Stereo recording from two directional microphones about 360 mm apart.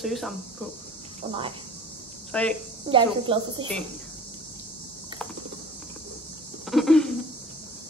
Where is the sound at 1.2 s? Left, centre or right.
Centre.